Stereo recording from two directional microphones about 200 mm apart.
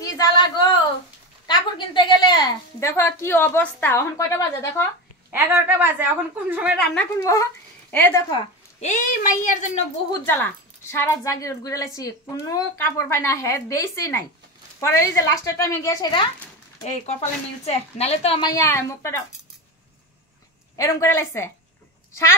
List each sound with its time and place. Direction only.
0.0 s a sound: 20° left (ahead or behind)
1.5 s a woman's voice: 20° left (ahead or behind)
5.3 s a woman's voice: 10° right (ahead or behind)
7.2 s a woman's voice: 15° left (ahead or behind)
8.7 s speech: 40° left (ahead or behind)
10.2 s a woman's voice: 10° left (ahead or behind)
16.8 s a woman's voice: 35° left (ahead or behind); by 19.2 s 15° left (ahead or behind)
20.7 s a woman's voice: 15° left (ahead or behind)